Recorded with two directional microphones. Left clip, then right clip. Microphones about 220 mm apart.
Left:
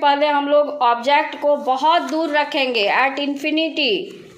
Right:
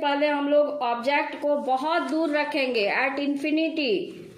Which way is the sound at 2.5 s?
40° left (ahead or behind).